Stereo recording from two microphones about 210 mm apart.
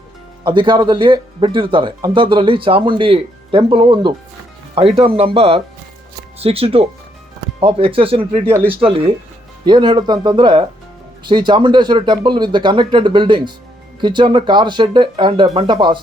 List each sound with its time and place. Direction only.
0.4 s speech: 25° right (ahead or behind)
8.5 s speech: 10° right (ahead or behind)
8.8 s speech: 25° right (ahead or behind)